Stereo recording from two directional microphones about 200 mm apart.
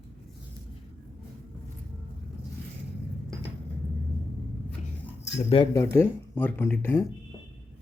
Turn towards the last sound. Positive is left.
turn(degrees=10)  # may be behind; listen again after turning